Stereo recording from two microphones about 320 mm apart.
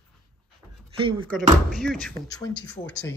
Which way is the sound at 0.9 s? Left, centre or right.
Centre.